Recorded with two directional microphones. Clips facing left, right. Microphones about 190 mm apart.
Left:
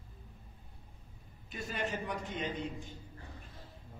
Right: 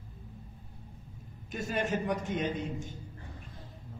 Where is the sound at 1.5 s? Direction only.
45° right (ahead or behind).